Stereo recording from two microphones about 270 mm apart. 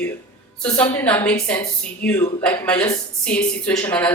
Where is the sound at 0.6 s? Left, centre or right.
Centre.